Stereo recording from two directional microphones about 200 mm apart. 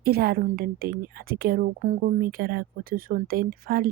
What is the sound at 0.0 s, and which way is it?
A woman's voice, 50° right (ahead or behind).